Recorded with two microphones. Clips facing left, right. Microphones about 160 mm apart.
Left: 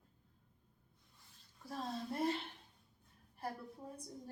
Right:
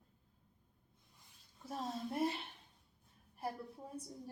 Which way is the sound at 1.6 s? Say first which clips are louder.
Right 1 dB; 20° right (ahead or behind).